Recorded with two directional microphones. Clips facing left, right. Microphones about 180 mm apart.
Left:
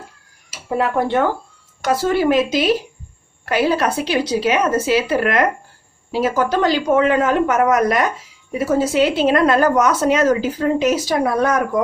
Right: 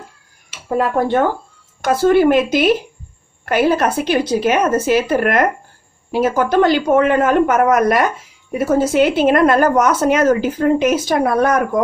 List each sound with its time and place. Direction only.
1.8 s a woman's voice: 55° right (ahead or behind)